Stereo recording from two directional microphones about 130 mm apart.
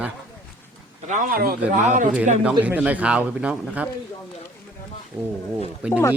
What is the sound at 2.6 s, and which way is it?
Speech, 10° right (ahead or behind).